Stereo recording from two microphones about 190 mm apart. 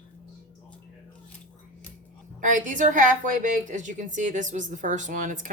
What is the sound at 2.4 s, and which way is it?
A woman's voice, 40° right (ahead or behind).